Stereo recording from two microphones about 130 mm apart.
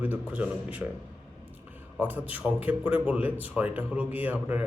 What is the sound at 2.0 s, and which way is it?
Speech, 10° right (ahead or behind).